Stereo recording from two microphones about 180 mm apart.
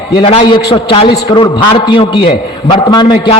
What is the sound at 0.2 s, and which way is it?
A man's voice, 30° left (ahead or behind).